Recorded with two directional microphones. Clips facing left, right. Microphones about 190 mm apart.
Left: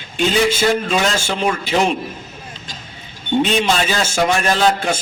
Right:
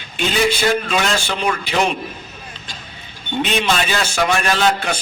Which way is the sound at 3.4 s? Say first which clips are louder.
Left 1 dB; 45° left (ahead or behind).